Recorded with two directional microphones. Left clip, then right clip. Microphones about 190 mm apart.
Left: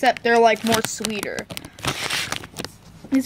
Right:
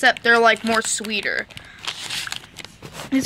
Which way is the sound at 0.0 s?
20° left (ahead or behind).